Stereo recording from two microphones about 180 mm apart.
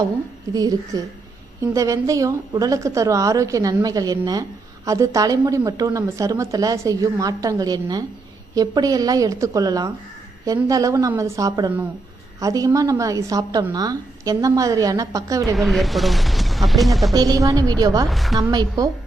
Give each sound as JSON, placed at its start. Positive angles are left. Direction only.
{"t": 0.5, "sound": "a woman's voice", "side_deg": -20}
{"t": 15.5, "sound": "speech", "side_deg": 0}
{"t": 17.2, "sound": "a woman's voice", "side_deg": -20}
{"t": 18.1, "sound": "speech", "side_deg": 0}
{"t": 18.5, "sound": "a woman's voice", "side_deg": -20}